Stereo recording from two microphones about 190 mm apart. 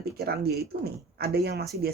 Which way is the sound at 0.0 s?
55° right (ahead or behind).